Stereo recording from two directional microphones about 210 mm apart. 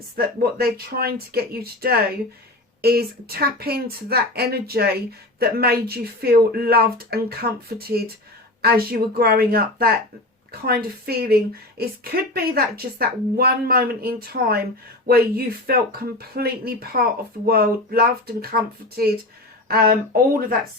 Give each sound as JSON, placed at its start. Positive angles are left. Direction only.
{"t": 0.2, "sound": "speech", "side_deg": -45}